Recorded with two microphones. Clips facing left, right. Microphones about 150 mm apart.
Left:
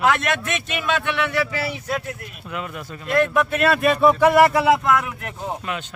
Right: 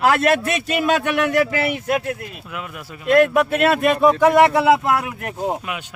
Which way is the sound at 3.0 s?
20° right (ahead or behind).